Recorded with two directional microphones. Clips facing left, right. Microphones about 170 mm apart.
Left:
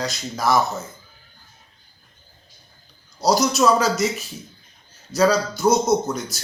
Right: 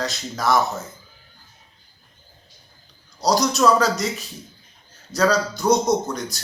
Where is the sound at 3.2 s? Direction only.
5° left (ahead or behind).